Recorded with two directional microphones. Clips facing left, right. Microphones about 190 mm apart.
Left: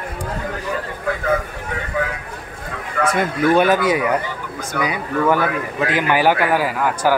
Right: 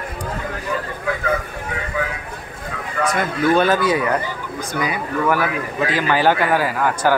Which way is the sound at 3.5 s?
15° left (ahead or behind).